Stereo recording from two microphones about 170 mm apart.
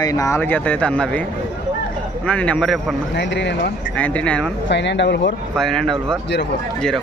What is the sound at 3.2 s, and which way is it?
Speech, 90° left.